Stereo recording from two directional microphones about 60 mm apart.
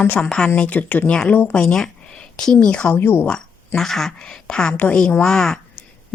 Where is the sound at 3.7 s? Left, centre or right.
Centre.